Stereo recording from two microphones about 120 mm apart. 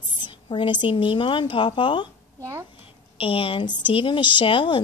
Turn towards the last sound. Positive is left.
turn(degrees=45)  # may be behind; listen again after turning